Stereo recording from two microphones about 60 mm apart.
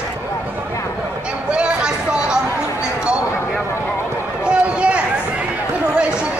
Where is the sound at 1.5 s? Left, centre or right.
Centre.